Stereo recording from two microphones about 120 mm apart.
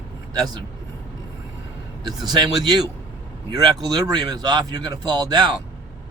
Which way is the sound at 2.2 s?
35° right (ahead or behind).